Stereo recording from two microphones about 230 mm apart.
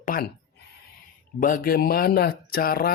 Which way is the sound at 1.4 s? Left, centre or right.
Left.